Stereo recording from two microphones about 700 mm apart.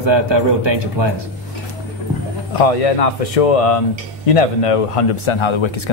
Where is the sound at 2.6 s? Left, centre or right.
Left.